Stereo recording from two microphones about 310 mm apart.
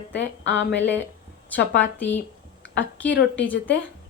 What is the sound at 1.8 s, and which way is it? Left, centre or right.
A woman's voice, centre.